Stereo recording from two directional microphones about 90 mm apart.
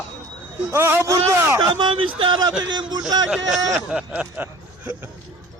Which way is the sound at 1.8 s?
65° right (ahead or behind).